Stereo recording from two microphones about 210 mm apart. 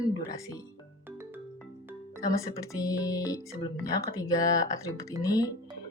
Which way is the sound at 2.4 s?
15° left (ahead or behind).